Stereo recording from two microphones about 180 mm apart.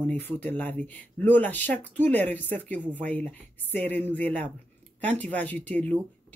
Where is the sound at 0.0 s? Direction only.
10° left (ahead or behind).